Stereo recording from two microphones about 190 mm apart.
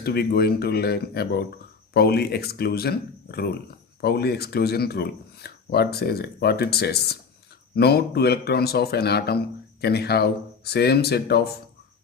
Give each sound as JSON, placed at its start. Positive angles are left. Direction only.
{"t": 0.0, "sound": "speech", "side_deg": 55}